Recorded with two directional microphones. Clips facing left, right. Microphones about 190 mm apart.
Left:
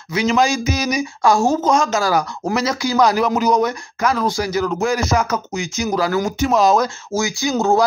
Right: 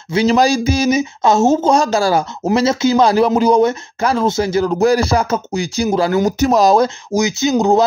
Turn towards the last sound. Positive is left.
turn(degrees=-20)  # may be behind; listen again after turning